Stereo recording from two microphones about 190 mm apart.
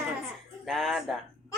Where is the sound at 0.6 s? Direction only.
Centre (ahead or behind).